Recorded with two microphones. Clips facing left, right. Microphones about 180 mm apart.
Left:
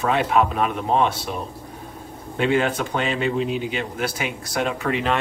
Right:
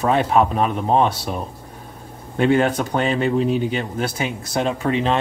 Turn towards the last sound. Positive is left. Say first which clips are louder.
# right 3 dB
turn(degrees=-25)  # may be behind; listen again after turning